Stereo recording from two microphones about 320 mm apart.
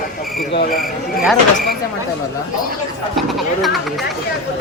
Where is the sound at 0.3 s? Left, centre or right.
Left.